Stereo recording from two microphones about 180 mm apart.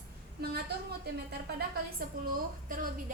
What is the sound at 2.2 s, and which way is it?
Speech, 55° right (ahead or behind).